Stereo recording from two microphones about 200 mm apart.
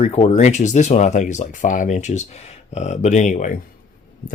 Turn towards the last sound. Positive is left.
turn(degrees=40)  # may be behind; listen again after turning